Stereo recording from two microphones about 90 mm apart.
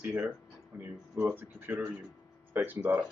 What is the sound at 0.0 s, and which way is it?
Speech, 20° right (ahead or behind).